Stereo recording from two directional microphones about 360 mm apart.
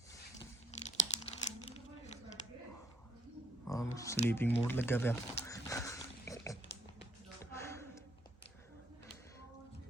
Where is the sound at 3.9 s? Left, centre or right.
Centre.